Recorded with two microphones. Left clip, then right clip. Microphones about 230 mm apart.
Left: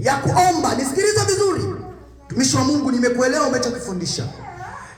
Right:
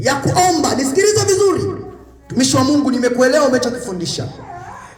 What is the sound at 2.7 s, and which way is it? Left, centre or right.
Music, right.